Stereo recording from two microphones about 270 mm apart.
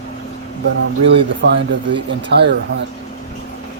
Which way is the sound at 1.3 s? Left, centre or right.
Right.